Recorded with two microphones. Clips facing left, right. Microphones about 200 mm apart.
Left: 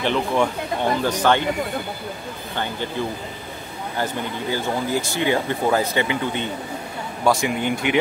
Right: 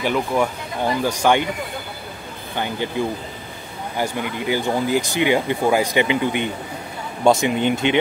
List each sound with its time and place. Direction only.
0.0 s speech: 10° right (ahead or behind)
2.5 s speech: 15° right (ahead or behind)
3.9 s speech: 15° right (ahead or behind)